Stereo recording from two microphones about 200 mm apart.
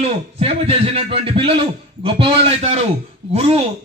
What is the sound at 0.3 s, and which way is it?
A man's voice, 30° right (ahead or behind).